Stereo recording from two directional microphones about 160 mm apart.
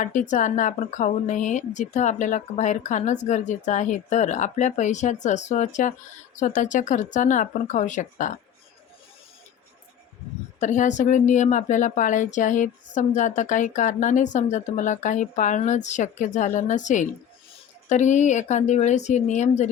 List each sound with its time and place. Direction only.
0.0 s a woman's voice: 50° left (ahead or behind)
10.6 s a woman's voice: 50° left (ahead or behind)